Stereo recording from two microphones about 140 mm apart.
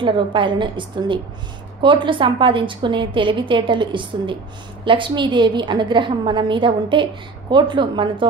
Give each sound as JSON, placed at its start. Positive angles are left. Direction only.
{"t": 0.0, "sound": "a woman's voice", "side_deg": -35}